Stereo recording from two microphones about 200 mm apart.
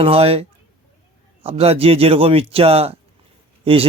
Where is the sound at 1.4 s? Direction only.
30° right (ahead or behind).